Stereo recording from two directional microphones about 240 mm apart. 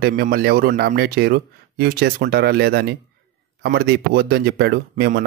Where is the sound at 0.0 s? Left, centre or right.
Right.